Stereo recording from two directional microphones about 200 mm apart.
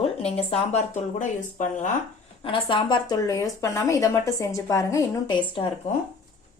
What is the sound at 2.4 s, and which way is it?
Speech, 25° left (ahead or behind).